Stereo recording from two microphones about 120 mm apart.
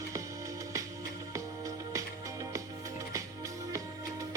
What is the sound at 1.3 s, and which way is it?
Music, 25° right (ahead or behind).